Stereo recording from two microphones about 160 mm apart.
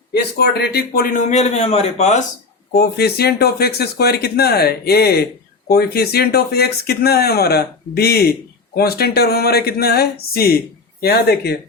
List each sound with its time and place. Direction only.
0.1 s speech: 90° left; by 1.1 s 70° left (ahead or behind)
1.3 s a man's voice: 45° left (ahead or behind)
2.7 s speech: 80° left
11.0 s speech: 80° left